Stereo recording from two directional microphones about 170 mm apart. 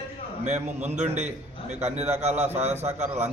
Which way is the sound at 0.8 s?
40° right (ahead or behind).